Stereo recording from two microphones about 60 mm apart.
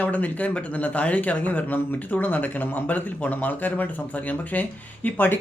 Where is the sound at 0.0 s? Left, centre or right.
Left.